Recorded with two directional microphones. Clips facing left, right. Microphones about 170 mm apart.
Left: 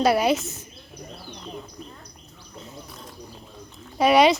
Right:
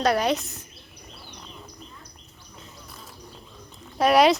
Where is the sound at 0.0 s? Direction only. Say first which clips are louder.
Left 3 dB; 5° left (ahead or behind).